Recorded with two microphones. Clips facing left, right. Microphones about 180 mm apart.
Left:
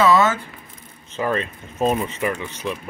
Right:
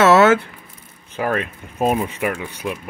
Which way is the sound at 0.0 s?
75° right (ahead or behind).